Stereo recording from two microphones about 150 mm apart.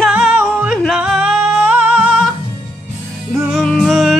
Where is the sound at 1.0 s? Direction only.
5° right (ahead or behind).